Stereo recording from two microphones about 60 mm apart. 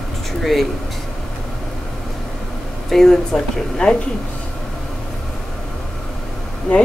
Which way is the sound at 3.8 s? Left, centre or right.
Centre.